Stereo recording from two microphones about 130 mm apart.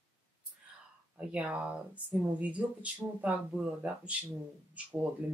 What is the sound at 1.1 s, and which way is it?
Speech, 10° right (ahead or behind).